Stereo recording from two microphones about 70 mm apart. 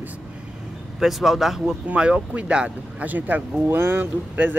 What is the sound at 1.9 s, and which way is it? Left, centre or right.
Speech, centre.